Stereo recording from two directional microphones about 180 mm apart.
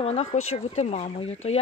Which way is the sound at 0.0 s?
35° left (ahead or behind).